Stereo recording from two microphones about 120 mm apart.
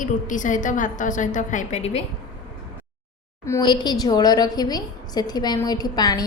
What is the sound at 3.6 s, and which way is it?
A woman's voice, 35° left (ahead or behind).